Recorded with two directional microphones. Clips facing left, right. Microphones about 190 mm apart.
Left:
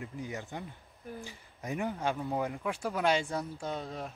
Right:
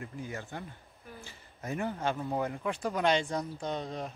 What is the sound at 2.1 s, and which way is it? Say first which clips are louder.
Speech: even; centre (ahead or behind).